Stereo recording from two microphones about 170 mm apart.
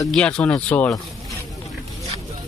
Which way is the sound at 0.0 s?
5° left (ahead or behind).